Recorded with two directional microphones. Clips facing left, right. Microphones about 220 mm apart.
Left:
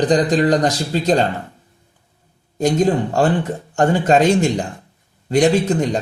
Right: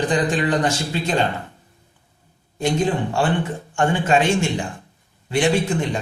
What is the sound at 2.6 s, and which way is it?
Speech, 40° left (ahead or behind).